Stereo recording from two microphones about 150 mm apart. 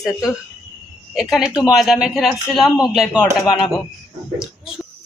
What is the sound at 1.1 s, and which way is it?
A man's voice, 5° right (ahead or behind).